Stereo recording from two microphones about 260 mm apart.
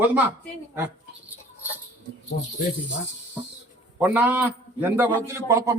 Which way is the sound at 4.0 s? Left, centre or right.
Centre.